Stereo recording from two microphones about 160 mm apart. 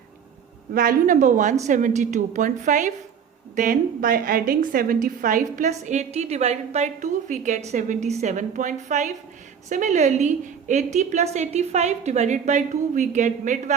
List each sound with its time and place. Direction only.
0.7 s a woman's voice: 60° right (ahead or behind)